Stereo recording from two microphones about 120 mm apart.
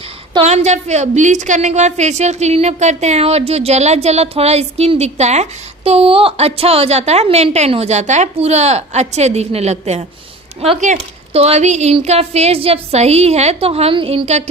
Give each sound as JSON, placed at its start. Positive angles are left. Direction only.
{"t": 0.4, "sound": "a woman's voice", "side_deg": -70}
{"t": 10.8, "sound": "speech", "side_deg": -90}
{"t": 11.3, "sound": "a woman's voice", "side_deg": -60}